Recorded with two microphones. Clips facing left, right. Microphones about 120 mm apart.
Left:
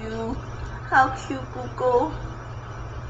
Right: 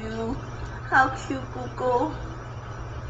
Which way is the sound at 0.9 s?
Centre (ahead or behind).